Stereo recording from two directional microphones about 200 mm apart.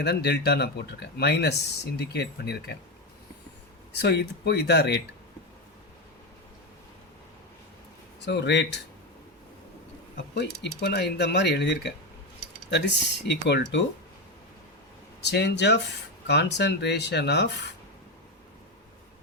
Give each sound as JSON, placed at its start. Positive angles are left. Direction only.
{"t": 0.0, "sound": "speech", "side_deg": 55}
{"t": 3.9, "sound": "speech", "side_deg": 55}
{"t": 8.2, "sound": "speech", "side_deg": 60}
{"t": 10.3, "sound": "speech", "side_deg": 60}
{"t": 15.2, "sound": "speech", "side_deg": 60}